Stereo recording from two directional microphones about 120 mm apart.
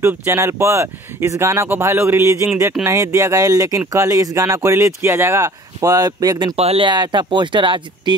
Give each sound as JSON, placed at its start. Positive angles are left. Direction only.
{"t": 0.0, "sound": "speech", "side_deg": -20}
{"t": 6.5, "sound": "speech", "side_deg": -55}
{"t": 6.9, "sound": "speech", "side_deg": -40}